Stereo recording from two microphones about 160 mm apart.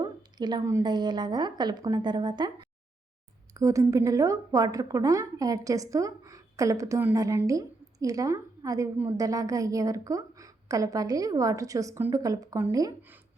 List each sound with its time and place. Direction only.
0.0 s a woman's voice: 25° right (ahead or behind)